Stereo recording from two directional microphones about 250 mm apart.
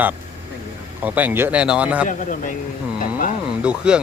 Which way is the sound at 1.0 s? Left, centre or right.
Centre.